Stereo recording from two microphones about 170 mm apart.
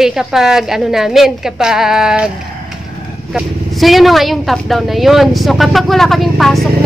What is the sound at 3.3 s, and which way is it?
Speech, centre (ahead or behind).